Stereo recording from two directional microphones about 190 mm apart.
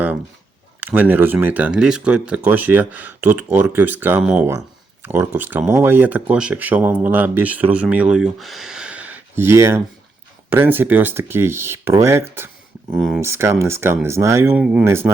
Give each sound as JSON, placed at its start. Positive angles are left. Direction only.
{"t": 0.8, "sound": "speech", "side_deg": -10}
{"t": 13.0, "sound": "speech", "side_deg": 0}
{"t": 13.2, "sound": "speech", "side_deg": -15}